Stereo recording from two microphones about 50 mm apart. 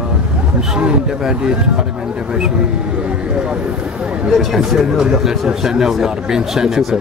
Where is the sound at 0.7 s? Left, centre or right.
Centre.